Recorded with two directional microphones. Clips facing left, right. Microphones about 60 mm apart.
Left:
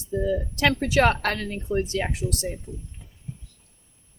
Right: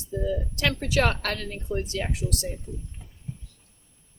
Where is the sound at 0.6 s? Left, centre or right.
Left.